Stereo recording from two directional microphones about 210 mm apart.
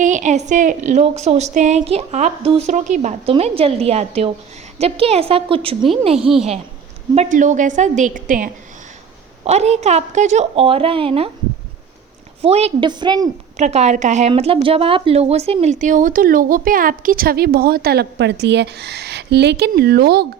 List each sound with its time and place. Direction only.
0.0 s a woman's voice: 35° right (ahead or behind)
6.1 s a woman's voice: centre (ahead or behind)
7.2 s speech: 35° right (ahead or behind)
12.4 s a woman's voice: 30° right (ahead or behind)
13.6 s speech: 30° right (ahead or behind); by 20.2 s 50° right (ahead or behind)